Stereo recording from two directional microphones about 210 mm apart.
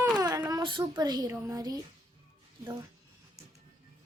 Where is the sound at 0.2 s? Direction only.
15° right (ahead or behind).